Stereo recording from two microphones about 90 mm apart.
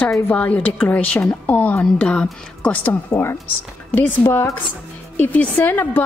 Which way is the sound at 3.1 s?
30° left (ahead or behind).